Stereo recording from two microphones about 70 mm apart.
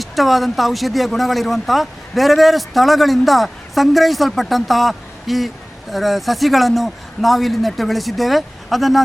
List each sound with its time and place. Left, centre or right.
0.0 s speech: centre